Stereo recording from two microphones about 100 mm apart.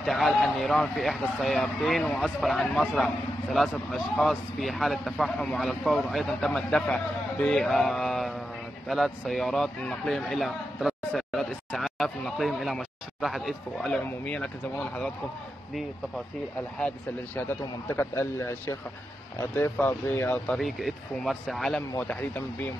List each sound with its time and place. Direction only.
0.0 s a man's voice: centre (ahead or behind)
2.0 s a man's voice: 10° left (ahead or behind)
17.4 s speech: 20° left (ahead or behind)
20.5 s a man's voice: centre (ahead or behind)